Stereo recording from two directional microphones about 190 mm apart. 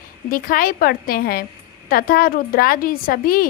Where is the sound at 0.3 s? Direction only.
50° left (ahead or behind).